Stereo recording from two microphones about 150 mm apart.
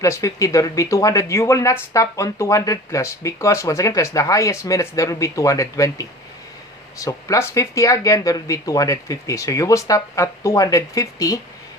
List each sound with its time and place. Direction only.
0.0 s speech: 20° left (ahead or behind)